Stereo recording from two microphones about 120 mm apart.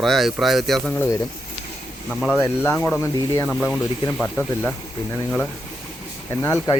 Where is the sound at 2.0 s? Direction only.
Centre (ahead or behind).